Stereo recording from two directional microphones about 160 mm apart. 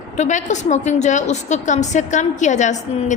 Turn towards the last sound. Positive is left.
turn(degrees=50)  # may be behind; listen again after turning